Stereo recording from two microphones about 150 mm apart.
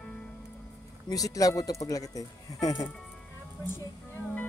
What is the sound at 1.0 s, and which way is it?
Speech, 25° left (ahead or behind).